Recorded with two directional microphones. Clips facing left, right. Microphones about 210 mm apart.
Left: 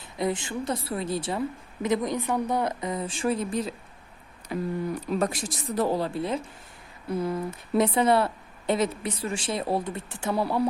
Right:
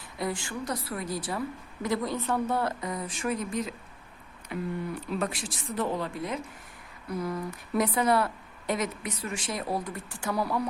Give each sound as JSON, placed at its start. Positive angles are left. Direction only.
{"t": 0.2, "sound": "a woman's voice", "side_deg": 20}